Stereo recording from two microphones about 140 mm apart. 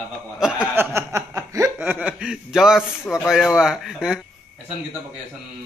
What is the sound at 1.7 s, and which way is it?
Speech, 10° right (ahead or behind).